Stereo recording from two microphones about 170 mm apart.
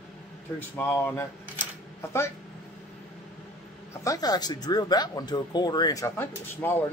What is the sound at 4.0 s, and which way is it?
Speech, 20° left (ahead or behind).